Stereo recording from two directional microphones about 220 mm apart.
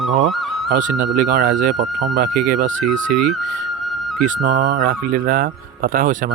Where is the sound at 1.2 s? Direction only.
35° right (ahead or behind).